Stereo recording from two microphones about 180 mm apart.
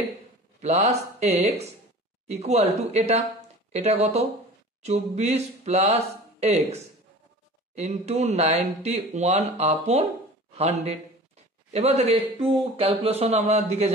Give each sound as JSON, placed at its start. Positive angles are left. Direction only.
{"t": 0.6, "sound": "a man's voice", "side_deg": -35}